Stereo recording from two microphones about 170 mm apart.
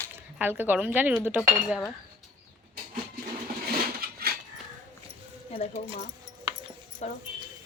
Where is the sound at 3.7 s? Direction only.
65° right (ahead or behind).